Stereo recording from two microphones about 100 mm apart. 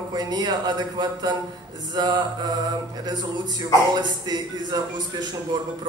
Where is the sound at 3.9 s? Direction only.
45° right (ahead or behind).